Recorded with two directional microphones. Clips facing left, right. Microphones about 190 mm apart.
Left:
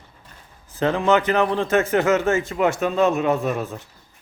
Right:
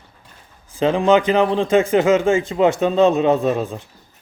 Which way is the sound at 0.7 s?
15° right (ahead or behind).